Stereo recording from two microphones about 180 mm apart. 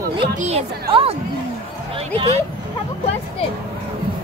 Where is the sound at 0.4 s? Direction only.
35° right (ahead or behind).